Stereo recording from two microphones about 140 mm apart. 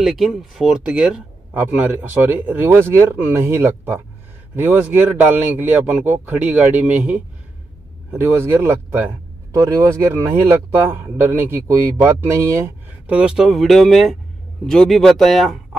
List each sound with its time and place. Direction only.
0.0 s speech: centre (ahead or behind)